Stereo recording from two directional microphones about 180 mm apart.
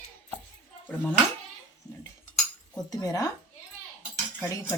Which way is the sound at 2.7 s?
20° left (ahead or behind).